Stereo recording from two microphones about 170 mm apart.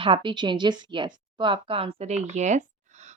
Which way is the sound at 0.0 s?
30° right (ahead or behind).